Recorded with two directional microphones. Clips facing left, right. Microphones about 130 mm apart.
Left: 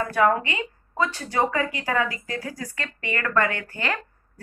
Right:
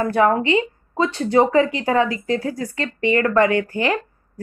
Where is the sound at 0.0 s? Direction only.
30° right (ahead or behind).